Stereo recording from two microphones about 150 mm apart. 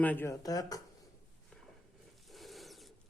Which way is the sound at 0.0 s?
10° left (ahead or behind).